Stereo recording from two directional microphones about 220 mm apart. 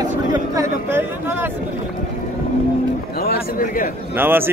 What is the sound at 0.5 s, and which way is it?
Speech, 10° right (ahead or behind).